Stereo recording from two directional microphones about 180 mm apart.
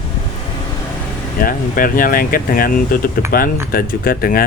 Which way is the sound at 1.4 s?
50° left (ahead or behind).